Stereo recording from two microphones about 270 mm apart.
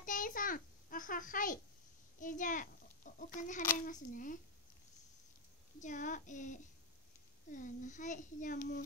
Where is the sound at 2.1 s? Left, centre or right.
Left.